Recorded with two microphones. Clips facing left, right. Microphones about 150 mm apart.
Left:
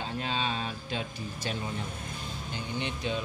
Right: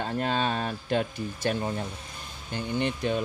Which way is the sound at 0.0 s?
50° right (ahead or behind).